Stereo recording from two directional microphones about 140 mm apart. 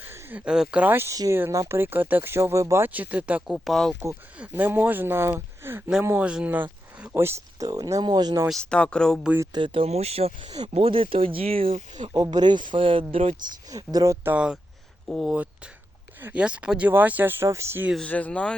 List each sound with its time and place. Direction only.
0.0 s speech: 15° right (ahead or behind)
4.4 s speech: 10° right (ahead or behind); by 8.4 s 30° right (ahead or behind)
8.4 s speech: 5° left (ahead or behind)
9.5 s speech: 35° right (ahead or behind)
12.0 s speech: 30° right (ahead or behind)
13.7 s speech: 25° right (ahead or behind)
14.3 s speech: 5° right (ahead or behind)
18.0 s speech: 10° left (ahead or behind)